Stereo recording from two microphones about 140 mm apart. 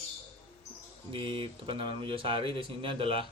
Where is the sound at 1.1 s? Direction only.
40° right (ahead or behind).